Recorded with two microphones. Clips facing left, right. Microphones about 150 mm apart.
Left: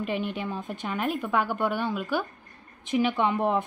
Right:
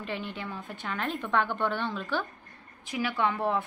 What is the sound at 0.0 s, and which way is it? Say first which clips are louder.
A woman's voice: left 6 dB; 15° left (ahead or behind).